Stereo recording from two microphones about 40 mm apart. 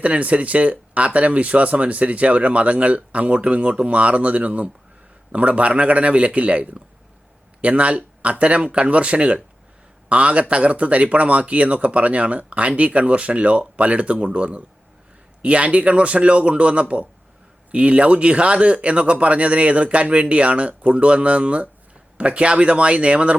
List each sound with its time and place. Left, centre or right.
0.0 s speech: right